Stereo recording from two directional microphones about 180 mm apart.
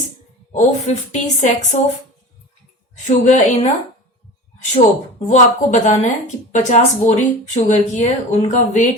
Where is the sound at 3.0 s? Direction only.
45° left (ahead or behind).